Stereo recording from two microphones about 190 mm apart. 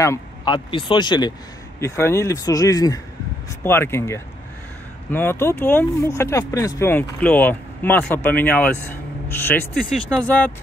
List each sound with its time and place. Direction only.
0.0 s speech: 15° left (ahead or behind)
0.7 s speech: 25° left (ahead or behind); by 10.5 s 10° left (ahead or behind)